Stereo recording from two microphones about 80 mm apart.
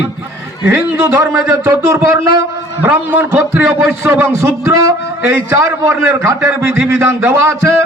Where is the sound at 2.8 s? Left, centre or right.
Right.